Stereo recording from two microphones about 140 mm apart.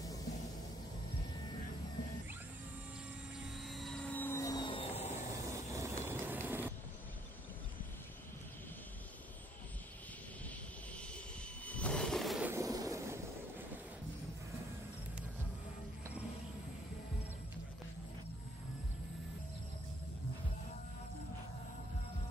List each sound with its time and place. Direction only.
3.6 s vehicle: centre (ahead or behind)
4.1 s vehicle: 15° left (ahead or behind)
4.6 s vehicle: 45° left (ahead or behind)
5.5 s vehicle: 20° right (ahead or behind)
11.6 s vehicle: 10° left (ahead or behind)
12.4 s vehicle: 25° right (ahead or behind)